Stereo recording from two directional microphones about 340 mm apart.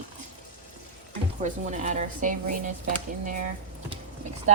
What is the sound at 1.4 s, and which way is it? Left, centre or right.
Speech, right.